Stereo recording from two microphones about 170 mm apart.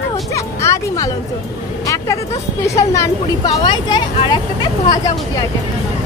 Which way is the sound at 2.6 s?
20° left (ahead or behind).